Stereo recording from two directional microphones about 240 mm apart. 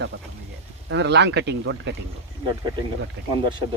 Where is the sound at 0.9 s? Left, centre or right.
Right.